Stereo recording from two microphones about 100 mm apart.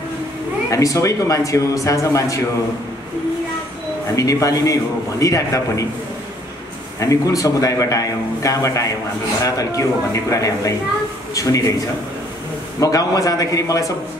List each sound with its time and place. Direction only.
0.7 s a man's voice: 35° left (ahead or behind)
4.1 s a man's voice: 35° left (ahead or behind)
7.0 s a man's voice: 35° left (ahead or behind)
12.8 s a man's voice: 35° left (ahead or behind)